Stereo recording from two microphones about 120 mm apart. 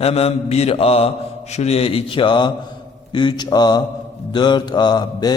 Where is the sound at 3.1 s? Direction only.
40° left (ahead or behind).